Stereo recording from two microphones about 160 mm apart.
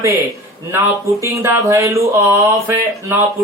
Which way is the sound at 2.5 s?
15° right (ahead or behind).